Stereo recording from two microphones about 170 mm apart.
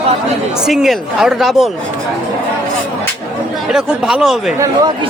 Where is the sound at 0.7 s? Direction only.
Centre (ahead or behind).